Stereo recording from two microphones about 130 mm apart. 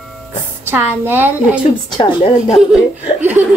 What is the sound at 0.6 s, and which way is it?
Speech, 15° right (ahead or behind).